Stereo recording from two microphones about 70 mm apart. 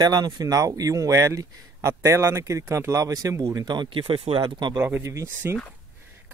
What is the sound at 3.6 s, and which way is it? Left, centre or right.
Speech, right.